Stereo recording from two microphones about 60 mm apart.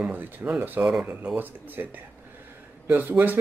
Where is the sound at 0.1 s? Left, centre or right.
Right.